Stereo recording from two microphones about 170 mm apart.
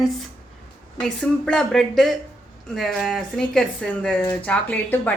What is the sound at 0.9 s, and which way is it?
Speech, 5° left (ahead or behind).